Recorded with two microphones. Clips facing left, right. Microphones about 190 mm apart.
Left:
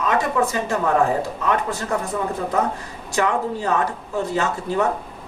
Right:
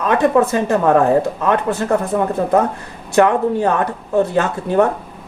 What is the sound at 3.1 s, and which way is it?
Speech, 60° right (ahead or behind).